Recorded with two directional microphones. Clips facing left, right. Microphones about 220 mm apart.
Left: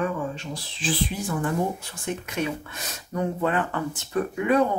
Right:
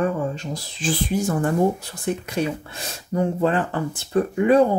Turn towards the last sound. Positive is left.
turn(degrees=-30)  # may be behind; listen again after turning